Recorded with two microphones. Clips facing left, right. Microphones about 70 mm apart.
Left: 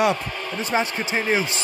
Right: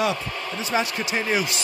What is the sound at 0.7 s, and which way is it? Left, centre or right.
Speech, left.